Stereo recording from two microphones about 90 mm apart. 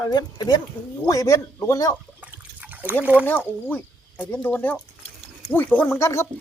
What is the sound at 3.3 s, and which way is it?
Speech, 20° left (ahead or behind).